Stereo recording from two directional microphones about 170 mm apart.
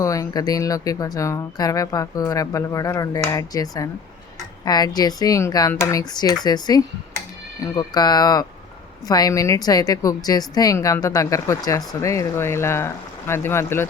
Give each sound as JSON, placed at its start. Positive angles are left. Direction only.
{"t": 0.0, "sound": "speech", "side_deg": 20}